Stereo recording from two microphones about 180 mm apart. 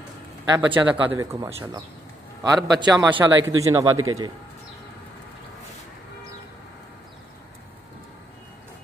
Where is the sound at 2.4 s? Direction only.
20° right (ahead or behind).